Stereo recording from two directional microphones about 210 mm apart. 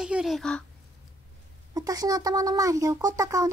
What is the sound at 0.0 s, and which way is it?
Speech, 5° right (ahead or behind).